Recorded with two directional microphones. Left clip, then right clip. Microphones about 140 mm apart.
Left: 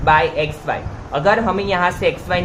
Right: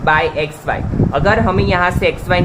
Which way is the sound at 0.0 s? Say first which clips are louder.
Even; 55° right (ahead or behind).